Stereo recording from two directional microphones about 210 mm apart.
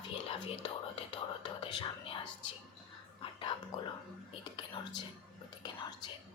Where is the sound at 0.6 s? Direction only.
25° left (ahead or behind).